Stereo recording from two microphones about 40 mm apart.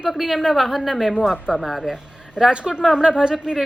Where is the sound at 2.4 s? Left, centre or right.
Centre.